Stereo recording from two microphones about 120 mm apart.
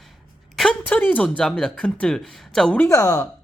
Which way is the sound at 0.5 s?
Centre (ahead or behind).